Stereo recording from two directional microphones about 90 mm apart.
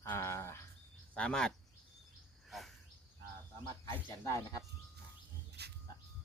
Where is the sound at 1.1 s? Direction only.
10° left (ahead or behind).